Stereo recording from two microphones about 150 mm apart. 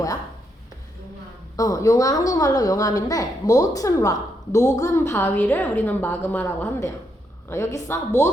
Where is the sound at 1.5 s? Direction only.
20° left (ahead or behind).